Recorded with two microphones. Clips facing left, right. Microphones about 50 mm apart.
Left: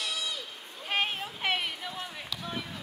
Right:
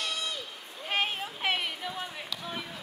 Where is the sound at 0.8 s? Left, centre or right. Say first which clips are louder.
Even; centre.